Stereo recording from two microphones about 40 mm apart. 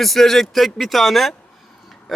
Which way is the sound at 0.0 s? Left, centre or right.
Centre.